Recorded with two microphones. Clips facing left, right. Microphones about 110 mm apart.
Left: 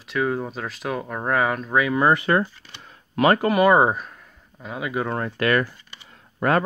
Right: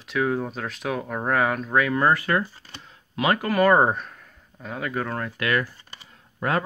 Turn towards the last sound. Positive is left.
turn(degrees=60)  # may be behind; listen again after turning